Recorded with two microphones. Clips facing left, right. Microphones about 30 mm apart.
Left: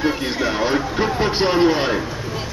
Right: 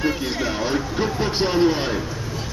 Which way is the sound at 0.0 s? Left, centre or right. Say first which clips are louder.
Left 3 dB; centre.